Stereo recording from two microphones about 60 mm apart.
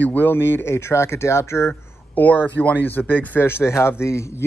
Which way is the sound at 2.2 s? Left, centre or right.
Left.